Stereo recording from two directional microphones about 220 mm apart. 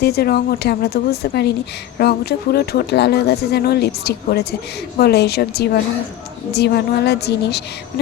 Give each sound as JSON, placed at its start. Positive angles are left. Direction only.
{"t": 0.0, "sound": "speech", "side_deg": 45}